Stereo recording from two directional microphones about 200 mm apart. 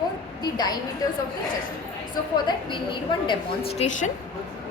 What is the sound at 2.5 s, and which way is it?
A woman's voice, 25° left (ahead or behind).